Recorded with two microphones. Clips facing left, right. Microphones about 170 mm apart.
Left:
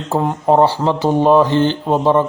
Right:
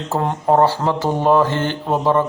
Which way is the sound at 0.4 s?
15° left (ahead or behind).